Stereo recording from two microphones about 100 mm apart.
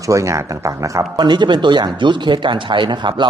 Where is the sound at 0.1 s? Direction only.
30° right (ahead or behind).